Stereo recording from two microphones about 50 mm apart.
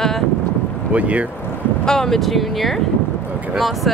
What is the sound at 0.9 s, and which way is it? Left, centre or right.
Speech, right.